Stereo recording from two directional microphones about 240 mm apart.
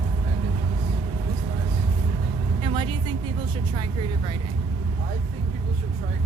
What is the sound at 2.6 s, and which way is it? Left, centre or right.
Vehicle, centre.